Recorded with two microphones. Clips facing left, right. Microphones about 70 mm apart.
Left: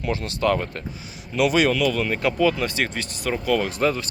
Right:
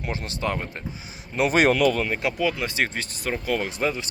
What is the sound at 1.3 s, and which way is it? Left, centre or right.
Speech, right.